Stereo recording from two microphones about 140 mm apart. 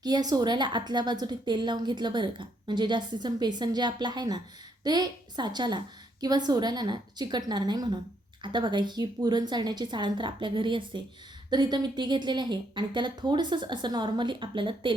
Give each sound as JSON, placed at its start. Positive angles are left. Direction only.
{"t": 0.0, "sound": "a woman's voice", "side_deg": -30}